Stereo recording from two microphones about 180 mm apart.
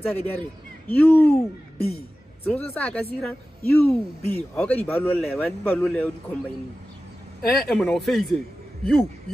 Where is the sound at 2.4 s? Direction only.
10° left (ahead or behind).